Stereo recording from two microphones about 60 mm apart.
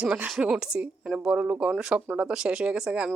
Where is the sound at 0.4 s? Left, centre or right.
Centre.